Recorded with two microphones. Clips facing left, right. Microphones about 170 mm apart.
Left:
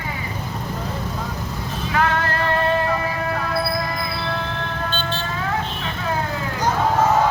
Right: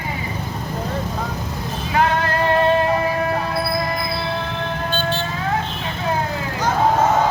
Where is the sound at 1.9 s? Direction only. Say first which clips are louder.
Right 2 dB; 20° right (ahead or behind).